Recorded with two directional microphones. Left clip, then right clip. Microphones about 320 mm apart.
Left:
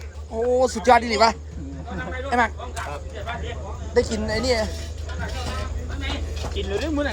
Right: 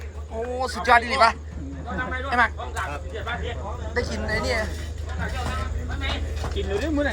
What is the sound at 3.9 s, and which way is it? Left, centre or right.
Speech, left.